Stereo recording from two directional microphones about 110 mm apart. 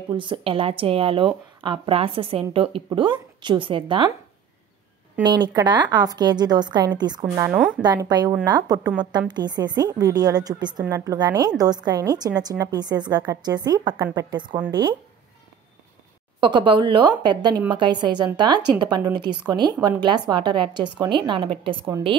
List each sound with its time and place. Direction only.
0.1 s a woman's voice: 50° right (ahead or behind)
5.2 s a woman's voice: 40° right (ahead or behind)
7.5 s speech: 10° right (ahead or behind)
7.8 s a woman's voice: 40° right (ahead or behind)
16.3 s a woman's voice: 45° right (ahead or behind)